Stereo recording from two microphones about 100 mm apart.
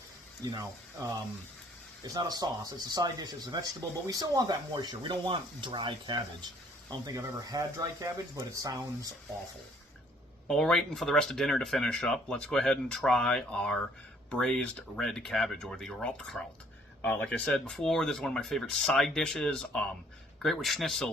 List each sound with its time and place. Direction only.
0.5 s speech: 35° right (ahead or behind); by 6.5 s 50° right (ahead or behind)
7.0 s speech: 40° right (ahead or behind)
10.5 s speech: 5° left (ahead or behind)